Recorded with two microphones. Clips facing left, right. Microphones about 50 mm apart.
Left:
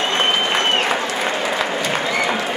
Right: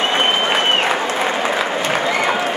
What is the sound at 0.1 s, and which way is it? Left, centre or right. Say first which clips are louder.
Applause: right 2 dB; centre.